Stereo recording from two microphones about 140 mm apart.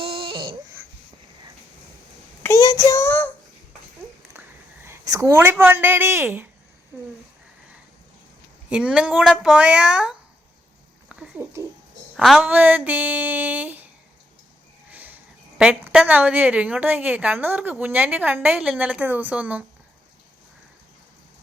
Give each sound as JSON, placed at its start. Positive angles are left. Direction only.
{"t": 0.0, "sound": "a sound", "side_deg": -40}
{"t": 2.4, "sound": "child singing", "side_deg": 25}
{"t": 4.4, "sound": "a woman's voice", "side_deg": -15}
{"t": 8.7, "sound": "a woman's voice", "side_deg": -5}
{"t": 11.1, "sound": "a sound", "side_deg": -5}
{"t": 12.1, "sound": "a woman's voice", "side_deg": 0}
{"t": 12.4, "sound": "a woman's voice", "side_deg": -10}
{"t": 14.8, "sound": "a woman's voice", "side_deg": -10}